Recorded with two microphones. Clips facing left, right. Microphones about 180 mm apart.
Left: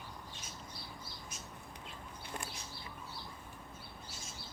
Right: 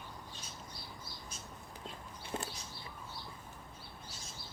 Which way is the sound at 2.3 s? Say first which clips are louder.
Right 5 dB; 25° right (ahead or behind).